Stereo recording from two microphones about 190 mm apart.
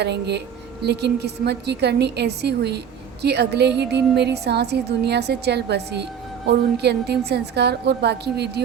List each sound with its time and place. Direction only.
0.0 s a woman's voice: 60° right (ahead or behind)